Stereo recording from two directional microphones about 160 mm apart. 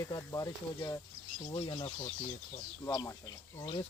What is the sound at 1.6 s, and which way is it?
Speech, 35° left (ahead or behind).